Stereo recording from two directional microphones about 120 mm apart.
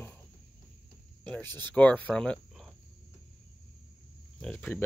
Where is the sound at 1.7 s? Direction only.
10° left (ahead or behind).